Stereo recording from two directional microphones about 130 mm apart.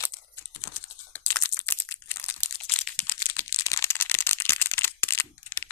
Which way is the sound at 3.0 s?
20° left (ahead or behind).